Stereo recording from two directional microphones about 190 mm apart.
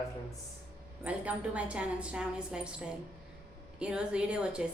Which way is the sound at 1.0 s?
5° right (ahead or behind).